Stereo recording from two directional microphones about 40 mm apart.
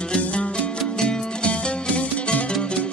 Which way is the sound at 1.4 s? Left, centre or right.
Left.